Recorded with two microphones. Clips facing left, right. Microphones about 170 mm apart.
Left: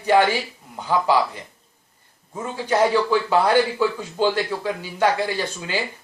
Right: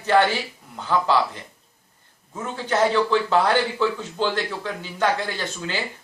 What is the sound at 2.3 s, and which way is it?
A man's voice, 10° left (ahead or behind).